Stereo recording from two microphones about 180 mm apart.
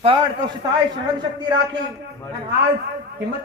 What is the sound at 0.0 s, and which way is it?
Speech, 30° right (ahead or behind).